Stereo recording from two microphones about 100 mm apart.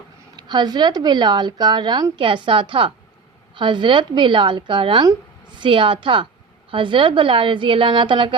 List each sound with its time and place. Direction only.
0.3 s a woman's voice: 45° right (ahead or behind)